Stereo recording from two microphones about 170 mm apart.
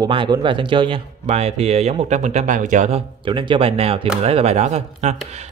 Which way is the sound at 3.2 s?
30° right (ahead or behind).